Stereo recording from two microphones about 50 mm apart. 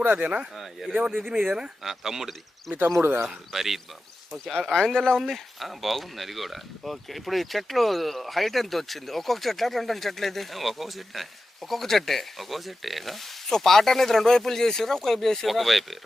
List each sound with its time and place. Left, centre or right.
0.0 s speech: right
0.5 s speech: centre
1.5 s speech: centre